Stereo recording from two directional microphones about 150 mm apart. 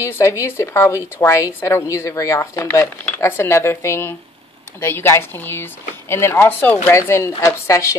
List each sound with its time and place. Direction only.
0.0 s a woman's voice: 20° left (ahead or behind)